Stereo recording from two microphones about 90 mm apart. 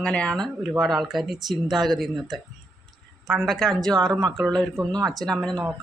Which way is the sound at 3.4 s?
5° left (ahead or behind).